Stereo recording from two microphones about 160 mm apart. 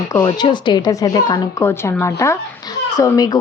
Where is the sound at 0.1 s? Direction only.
20° left (ahead or behind).